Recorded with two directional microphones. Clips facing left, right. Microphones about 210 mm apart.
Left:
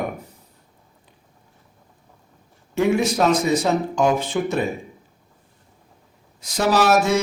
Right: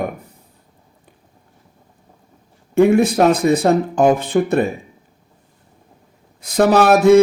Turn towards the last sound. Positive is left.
turn(degrees=-55)  # may be behind; listen again after turning